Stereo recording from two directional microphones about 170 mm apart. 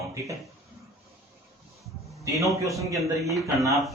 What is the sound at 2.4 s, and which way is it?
Speech, 20° right (ahead or behind).